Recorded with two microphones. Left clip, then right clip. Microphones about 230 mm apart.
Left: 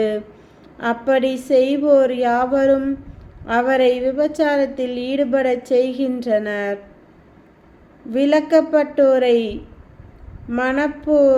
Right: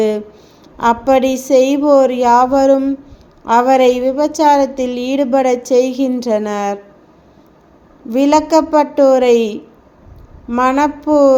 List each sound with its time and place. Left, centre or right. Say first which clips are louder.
0.8 s a woman's voice: right 6 dB; right
8.1 s a woman's voice: right 4 dB; right